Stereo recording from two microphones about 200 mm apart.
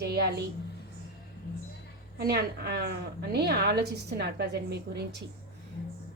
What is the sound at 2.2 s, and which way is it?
Speech, 50° right (ahead or behind).